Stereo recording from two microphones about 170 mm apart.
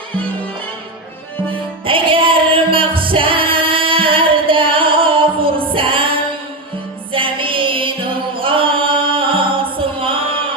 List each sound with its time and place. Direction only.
1.8 s music: 30° right (ahead or behind)
8.4 s a capella: 30° right (ahead or behind)